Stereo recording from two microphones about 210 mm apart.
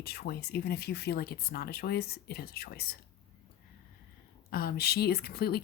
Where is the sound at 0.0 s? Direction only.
50° left (ahead or behind).